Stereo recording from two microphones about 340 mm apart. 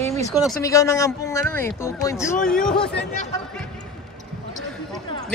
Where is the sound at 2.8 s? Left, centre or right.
Left.